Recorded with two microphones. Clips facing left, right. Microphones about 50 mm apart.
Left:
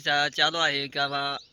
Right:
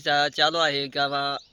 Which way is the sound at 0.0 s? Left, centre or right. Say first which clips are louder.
Right 2 dB; left.